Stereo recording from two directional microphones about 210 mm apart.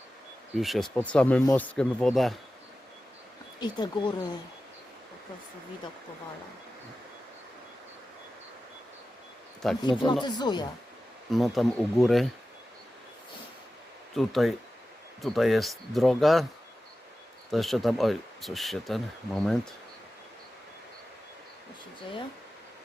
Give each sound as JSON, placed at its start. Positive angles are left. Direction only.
{"t": 0.5, "sound": "speech", "side_deg": 0}
{"t": 3.6, "sound": "speech", "side_deg": 20}
{"t": 9.6, "sound": "speech", "side_deg": 0}
{"t": 10.0, "sound": "speech", "side_deg": 20}
{"t": 11.3, "sound": "speech", "side_deg": 0}
{"t": 14.2, "sound": "speech", "side_deg": 0}
{"t": 17.5, "sound": "speech", "side_deg": 0}